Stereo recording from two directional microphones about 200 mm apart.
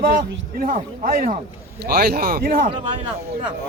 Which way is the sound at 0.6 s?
45° right (ahead or behind).